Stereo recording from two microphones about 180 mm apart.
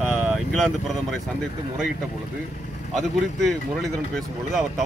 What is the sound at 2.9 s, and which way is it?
Speech, centre (ahead or behind).